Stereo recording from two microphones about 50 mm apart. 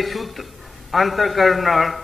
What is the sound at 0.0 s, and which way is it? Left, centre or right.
A man's voice, centre.